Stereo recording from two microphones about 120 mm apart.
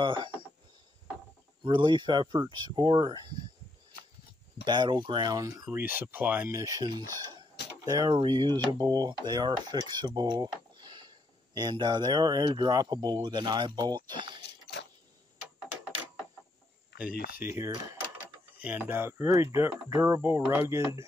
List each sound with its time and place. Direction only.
0.0 s speech: 45° right (ahead or behind)
1.6 s cutlery: 40° right (ahead or behind)
4.6 s cutlery: 40° right (ahead or behind)
5.7 s speech: 15° right (ahead or behind)
6.5 s cutlery: 30° right (ahead or behind)
7.8 s speech: 35° right (ahead or behind)
8.1 s cutlery: 40° right (ahead or behind)
10.8 s a sound: 35° right (ahead or behind)
11.5 s cutlery: 35° right (ahead or behind)
17.0 s speech: 10° right (ahead or behind)
18.6 s speech: 15° right (ahead or behind)